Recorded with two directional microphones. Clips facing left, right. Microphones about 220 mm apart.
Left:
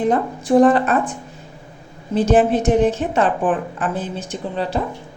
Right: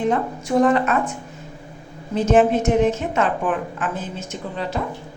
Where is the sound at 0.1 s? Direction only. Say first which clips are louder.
Left 4 dB; 35° left (ahead or behind).